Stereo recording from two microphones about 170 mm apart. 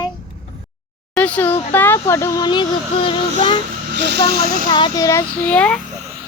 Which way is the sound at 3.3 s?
50° right (ahead or behind).